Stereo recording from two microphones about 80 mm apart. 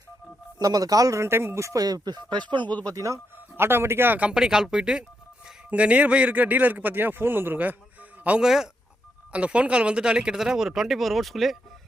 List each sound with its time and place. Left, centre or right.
0.6 s speech: right
1.2 s speech: right
2.8 s speech: right
3.6 s a man's voice: right
8.4 s speech: centre